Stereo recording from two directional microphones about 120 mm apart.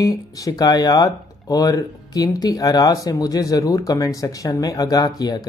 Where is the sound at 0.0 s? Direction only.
30° left (ahead or behind).